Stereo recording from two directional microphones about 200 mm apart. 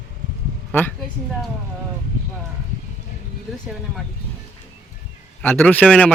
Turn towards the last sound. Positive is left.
turn(degrees=5)  # may be behind; listen again after turning